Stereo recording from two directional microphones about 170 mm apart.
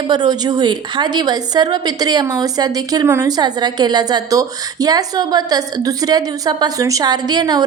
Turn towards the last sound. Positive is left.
turn(degrees=-25)  # may be behind; listen again after turning